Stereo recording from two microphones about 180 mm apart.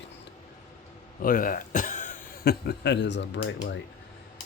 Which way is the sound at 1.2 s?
50° left (ahead or behind).